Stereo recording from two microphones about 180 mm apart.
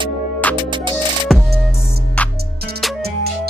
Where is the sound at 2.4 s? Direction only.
60° right (ahead or behind).